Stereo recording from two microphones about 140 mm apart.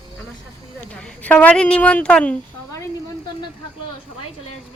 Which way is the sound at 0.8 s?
5° left (ahead or behind).